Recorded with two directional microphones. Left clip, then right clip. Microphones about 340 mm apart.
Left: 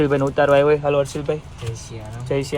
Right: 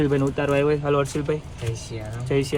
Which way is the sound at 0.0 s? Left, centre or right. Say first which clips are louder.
Left 5 dB; centre.